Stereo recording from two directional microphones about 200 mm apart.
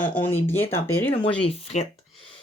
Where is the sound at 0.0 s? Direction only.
10° left (ahead or behind).